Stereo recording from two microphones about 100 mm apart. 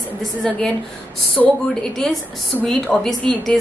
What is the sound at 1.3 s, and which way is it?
A woman's voice, 5° left (ahead or behind).